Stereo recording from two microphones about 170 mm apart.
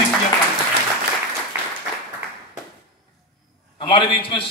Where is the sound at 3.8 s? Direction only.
30° left (ahead or behind).